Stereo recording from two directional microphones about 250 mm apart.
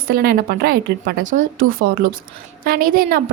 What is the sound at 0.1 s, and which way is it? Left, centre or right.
Speech, right.